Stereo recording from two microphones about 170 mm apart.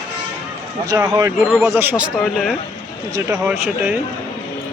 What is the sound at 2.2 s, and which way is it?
Speech, centre (ahead or behind).